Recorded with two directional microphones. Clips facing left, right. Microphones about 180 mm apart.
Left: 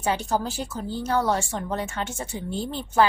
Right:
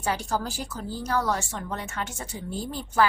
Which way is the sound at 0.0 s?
20° left (ahead or behind).